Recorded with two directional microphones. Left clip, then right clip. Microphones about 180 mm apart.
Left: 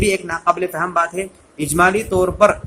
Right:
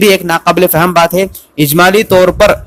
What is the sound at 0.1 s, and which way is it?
Speech, 50° right (ahead or behind).